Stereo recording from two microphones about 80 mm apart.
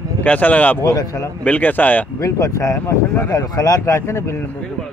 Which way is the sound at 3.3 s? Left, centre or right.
Left.